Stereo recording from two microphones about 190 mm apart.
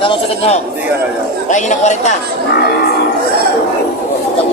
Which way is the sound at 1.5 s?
40° left (ahead or behind).